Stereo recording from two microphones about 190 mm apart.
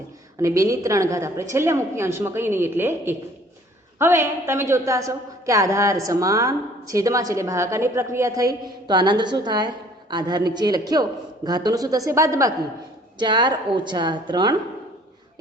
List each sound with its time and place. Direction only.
0.3 s a woman's voice: 15° right (ahead or behind)